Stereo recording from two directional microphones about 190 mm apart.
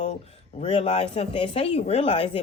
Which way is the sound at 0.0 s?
35° left (ahead or behind).